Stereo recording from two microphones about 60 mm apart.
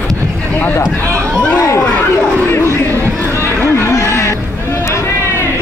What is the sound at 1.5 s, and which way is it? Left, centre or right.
Speech, left.